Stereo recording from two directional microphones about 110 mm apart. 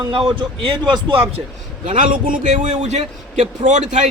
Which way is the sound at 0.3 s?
45° right (ahead or behind).